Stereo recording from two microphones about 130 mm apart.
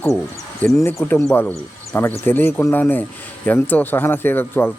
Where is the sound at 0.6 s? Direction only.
15° left (ahead or behind).